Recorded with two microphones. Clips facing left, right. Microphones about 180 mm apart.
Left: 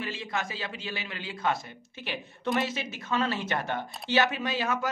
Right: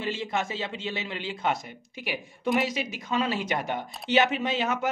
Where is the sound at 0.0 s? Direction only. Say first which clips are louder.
Right 4 dB; 25° right (ahead or behind).